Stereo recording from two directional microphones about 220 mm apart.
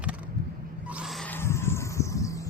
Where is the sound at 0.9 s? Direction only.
5° right (ahead or behind); by 2.4 s 15° left (ahead or behind).